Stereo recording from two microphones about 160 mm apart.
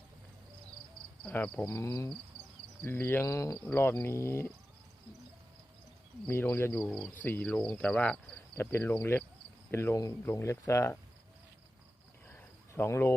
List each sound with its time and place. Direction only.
1.2 s speech: 5° left (ahead or behind)
1.8 s speech: 20° left (ahead or behind)
6.2 s speech: 10° left (ahead or behind)
12.3 s cricket: 15° left (ahead or behind)